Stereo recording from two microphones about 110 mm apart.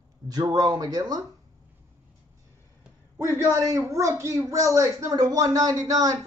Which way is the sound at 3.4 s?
30° right (ahead or behind).